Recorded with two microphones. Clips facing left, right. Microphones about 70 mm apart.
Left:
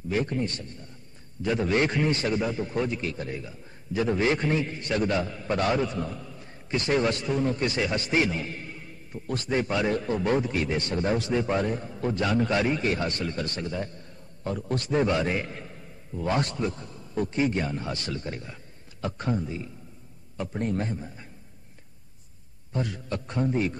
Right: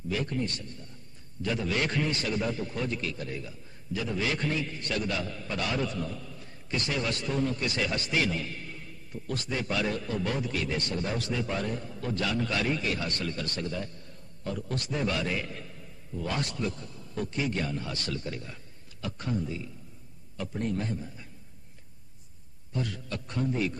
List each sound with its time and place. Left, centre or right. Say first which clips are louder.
0.1 s a man's voice: left 4 dB; left
2.3 s a man's voice: left 4 dB; left
4.0 s a man's voice: left 7 dB; left
5.9 s a sound: left 3 dB; left
6.9 s a man's voice: left 8 dB; left
22.8 s a man's voice: left 4 dB; left